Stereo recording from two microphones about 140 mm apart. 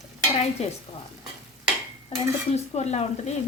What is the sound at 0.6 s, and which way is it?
Speech, 50° left (ahead or behind).